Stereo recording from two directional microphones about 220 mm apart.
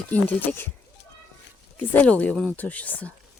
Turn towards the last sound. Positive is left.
turn(degrees=5)  # may be behind; listen again after turning